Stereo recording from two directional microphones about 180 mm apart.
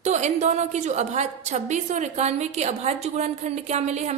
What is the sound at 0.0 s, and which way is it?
A woman's voice, 40° right (ahead or behind).